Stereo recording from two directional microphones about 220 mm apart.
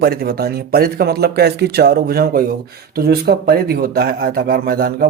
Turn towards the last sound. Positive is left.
turn(degrees=-40)  # may be behind; listen again after turning